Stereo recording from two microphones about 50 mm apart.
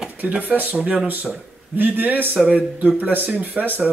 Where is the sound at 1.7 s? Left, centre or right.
Right.